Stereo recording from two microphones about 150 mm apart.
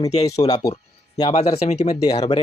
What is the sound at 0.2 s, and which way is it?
Speech, 25° left (ahead or behind).